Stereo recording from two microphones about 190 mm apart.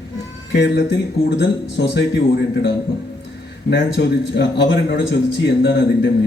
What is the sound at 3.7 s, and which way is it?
A man's voice, 65° left (ahead or behind).